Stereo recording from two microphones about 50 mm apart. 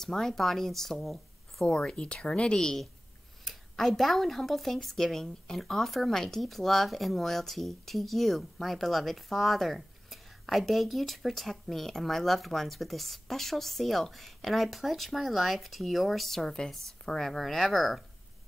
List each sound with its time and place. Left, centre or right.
0.0 s speech: centre
1.7 s speech: left
3.4 s speech: centre
16.4 s a woman's voice: centre